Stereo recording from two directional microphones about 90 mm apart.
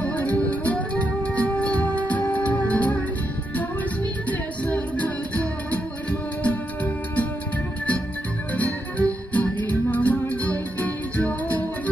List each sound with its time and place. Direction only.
0.0 s music: 20° left (ahead or behind)
4.3 s music: 15° left (ahead or behind)
8.5 s music: 15° left (ahead or behind)